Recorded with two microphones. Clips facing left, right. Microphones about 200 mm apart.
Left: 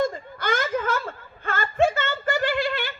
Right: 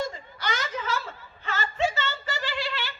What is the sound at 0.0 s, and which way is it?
Whimper, 55° left (ahead or behind).